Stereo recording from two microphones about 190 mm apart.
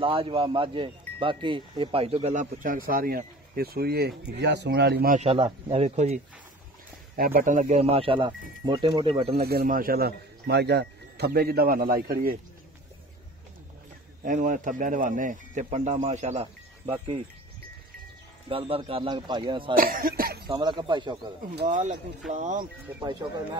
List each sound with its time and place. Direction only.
0.0 s speech: 30° right (ahead or behind); by 5.1 s 60° right (ahead or behind)
5.1 s speech: 30° right (ahead or behind)
7.2 s speech: 50° right (ahead or behind); by 9.4 s 30° right (ahead or behind)
9.4 s speech: 55° right (ahead or behind)
14.2 s speech: 45° right (ahead or behind)
18.5 s speech: 30° right (ahead or behind)
19.7 s speech: 50° right (ahead or behind)
20.4 s speech: 25° right (ahead or behind)
21.6 s speech: 40° right (ahead or behind)